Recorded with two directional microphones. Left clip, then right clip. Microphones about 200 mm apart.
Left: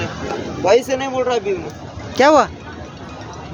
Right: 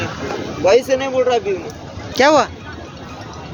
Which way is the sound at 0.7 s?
55° left (ahead or behind).